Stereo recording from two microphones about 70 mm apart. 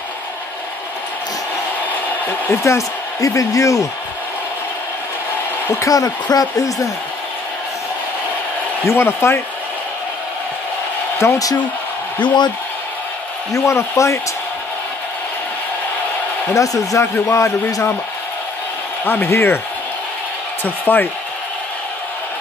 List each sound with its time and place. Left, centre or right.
2.5 s speech: left
5.8 s speech: left
8.8 s speech: left
11.2 s speech: left
13.5 s speech: left
16.5 s speech: left
17.0 s speech: left
19.0 s speech: left
20.6 s speech: left